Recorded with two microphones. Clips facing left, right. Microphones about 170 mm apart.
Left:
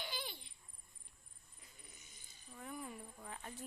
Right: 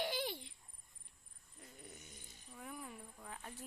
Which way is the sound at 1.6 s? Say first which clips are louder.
Right 9 dB; 65° right (ahead or behind).